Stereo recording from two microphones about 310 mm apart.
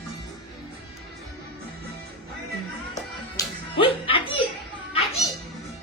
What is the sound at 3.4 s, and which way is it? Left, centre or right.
Music, centre.